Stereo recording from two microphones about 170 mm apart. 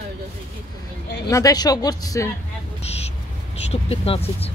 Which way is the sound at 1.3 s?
20° left (ahead or behind).